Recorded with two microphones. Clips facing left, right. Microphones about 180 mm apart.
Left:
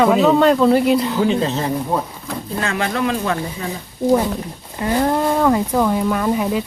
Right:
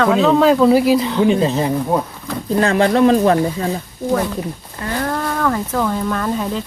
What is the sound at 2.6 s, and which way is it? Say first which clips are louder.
Speech: right 8 dB; 35° right (ahead or behind).